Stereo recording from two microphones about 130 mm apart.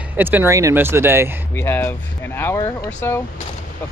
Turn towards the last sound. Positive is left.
turn(degrees=20)  # may be behind; listen again after turning